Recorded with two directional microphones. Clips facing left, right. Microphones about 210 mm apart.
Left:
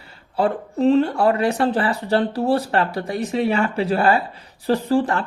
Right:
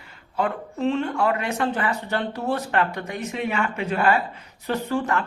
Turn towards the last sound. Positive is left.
turn(degrees=35)  # may be behind; listen again after turning